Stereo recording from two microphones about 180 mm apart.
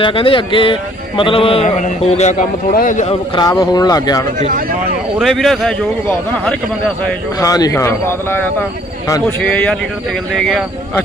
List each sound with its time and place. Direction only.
0.0 s speech: 30° left (ahead or behind)
3.6 s speech: 20° left (ahead or behind)
5.2 s a man's voice: centre (ahead or behind)
7.3 s a man's voice: 20° left (ahead or behind); by 11.0 s 5° left (ahead or behind)